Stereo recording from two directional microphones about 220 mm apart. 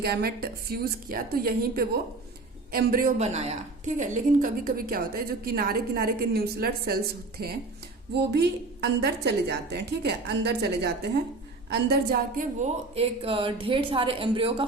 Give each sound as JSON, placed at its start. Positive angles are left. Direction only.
{"t": 0.0, "sound": "a woman's voice", "side_deg": -45}